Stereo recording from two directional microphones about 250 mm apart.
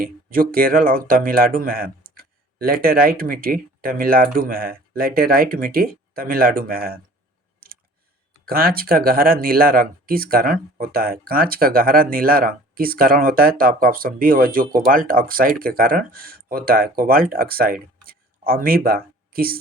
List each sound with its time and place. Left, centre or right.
0.0 s speech: right
8.4 s speech: right
18.0 s a sound: right